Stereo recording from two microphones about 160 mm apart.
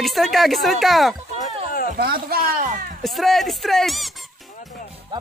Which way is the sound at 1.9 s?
70° right (ahead or behind).